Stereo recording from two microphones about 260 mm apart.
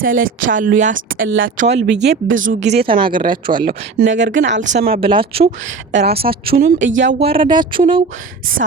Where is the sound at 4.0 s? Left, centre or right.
Right.